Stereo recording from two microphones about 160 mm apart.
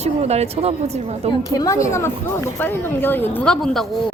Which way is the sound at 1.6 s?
20° left (ahead or behind).